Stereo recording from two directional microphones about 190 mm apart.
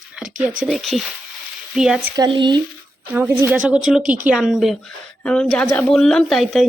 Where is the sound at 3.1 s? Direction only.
10° right (ahead or behind).